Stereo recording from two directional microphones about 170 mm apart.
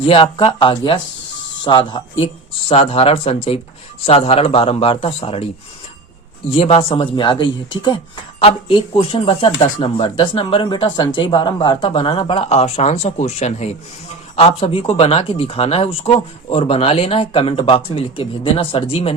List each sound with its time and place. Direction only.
0.0 s speech: 30° left (ahead or behind)
6.5 s speech: 35° left (ahead or behind)